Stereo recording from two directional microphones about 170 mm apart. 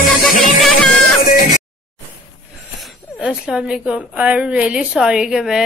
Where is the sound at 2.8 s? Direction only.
5° right (ahead or behind).